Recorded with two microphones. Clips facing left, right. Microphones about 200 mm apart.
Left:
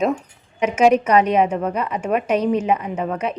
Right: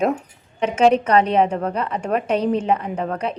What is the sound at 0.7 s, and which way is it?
A woman's voice, 10° left (ahead or behind).